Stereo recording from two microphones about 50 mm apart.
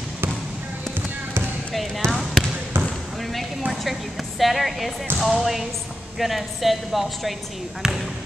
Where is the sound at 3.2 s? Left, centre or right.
Centre.